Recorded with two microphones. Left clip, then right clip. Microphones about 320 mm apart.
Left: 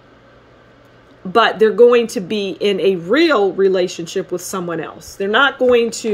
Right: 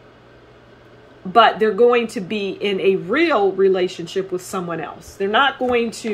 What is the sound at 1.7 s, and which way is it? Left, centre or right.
Speech, left.